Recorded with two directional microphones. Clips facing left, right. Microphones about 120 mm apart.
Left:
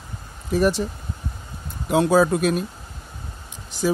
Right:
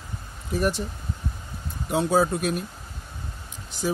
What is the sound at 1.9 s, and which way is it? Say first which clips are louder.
Speech: left 5 dB; 90° left.